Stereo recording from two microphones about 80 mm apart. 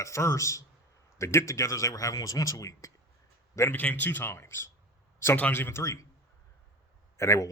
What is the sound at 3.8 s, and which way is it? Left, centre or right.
Speech, left.